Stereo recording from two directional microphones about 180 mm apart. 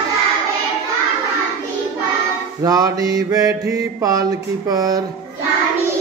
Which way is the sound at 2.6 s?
20° right (ahead or behind).